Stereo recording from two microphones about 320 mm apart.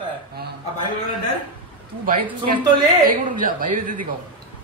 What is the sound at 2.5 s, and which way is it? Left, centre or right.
A man's voice, right.